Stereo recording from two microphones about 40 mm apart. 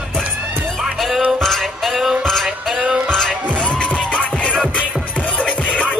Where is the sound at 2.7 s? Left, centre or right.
Right.